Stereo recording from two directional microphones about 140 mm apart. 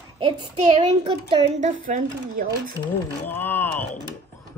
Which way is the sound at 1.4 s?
60° right (ahead or behind).